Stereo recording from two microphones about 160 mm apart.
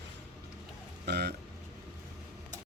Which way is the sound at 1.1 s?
90° right.